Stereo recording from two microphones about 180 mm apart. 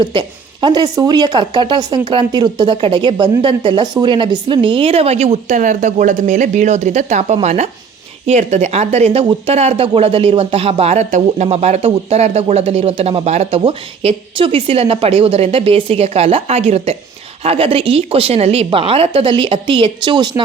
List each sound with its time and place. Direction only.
0.0 s speech: 25° right (ahead or behind)